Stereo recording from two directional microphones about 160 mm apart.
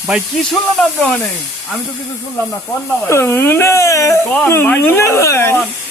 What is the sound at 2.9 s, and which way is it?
Speech, 15° left (ahead or behind).